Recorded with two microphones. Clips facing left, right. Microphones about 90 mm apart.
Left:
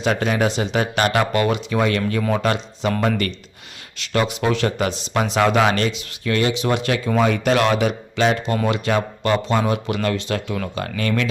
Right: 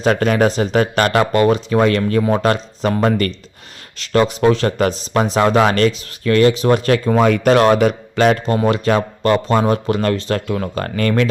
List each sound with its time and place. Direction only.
0.0 s a man's voice: 45° right (ahead or behind)
7.3 s a man's voice: 50° right (ahead or behind)